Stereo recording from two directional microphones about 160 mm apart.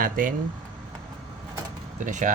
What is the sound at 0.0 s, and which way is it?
Speech, 60° right (ahead or behind).